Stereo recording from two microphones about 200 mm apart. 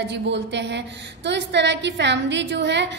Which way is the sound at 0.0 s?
60° right (ahead or behind).